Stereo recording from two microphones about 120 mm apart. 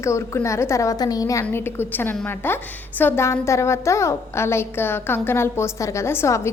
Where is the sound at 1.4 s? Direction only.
20° left (ahead or behind).